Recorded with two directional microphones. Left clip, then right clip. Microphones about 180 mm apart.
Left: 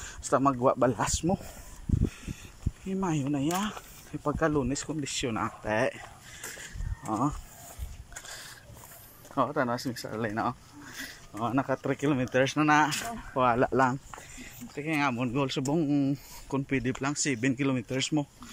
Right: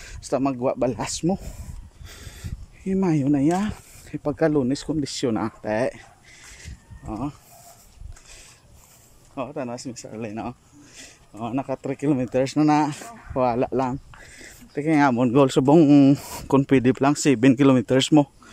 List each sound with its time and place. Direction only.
0.3 s speech: 20° right (ahead or behind)
2.0 s a sound: 35° right (ahead or behind)
2.9 s speech: 25° right (ahead or behind)
6.6 s a sound: 10° right (ahead or behind)
9.3 s speech: 5° right (ahead or behind)
14.4 s speech: 35° right (ahead or behind); by 18.3 s 55° right (ahead or behind)